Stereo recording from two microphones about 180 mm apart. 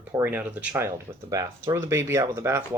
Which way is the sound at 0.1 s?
10° right (ahead or behind).